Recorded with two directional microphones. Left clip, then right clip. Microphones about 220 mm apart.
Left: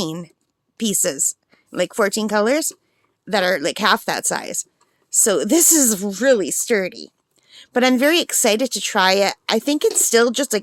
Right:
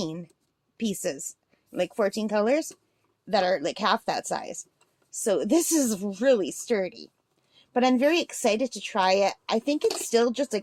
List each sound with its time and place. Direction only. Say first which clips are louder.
0.0 s speech: left 7 dB; 30° left (ahead or behind)